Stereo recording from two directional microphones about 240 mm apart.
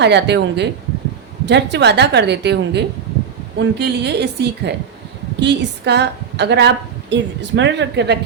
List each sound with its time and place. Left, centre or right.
0.0 s a woman's voice: right